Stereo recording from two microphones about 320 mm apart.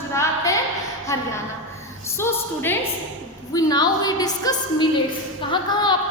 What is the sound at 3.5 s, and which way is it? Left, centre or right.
A woman's voice, centre.